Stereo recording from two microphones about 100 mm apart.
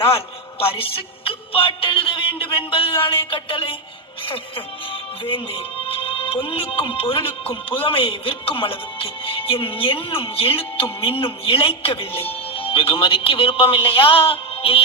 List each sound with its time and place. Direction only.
0.6 s music: 65° left (ahead or behind)
4.3 s speech: 65° left (ahead or behind)